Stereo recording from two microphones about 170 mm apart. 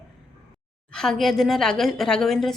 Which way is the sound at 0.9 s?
Centre (ahead or behind).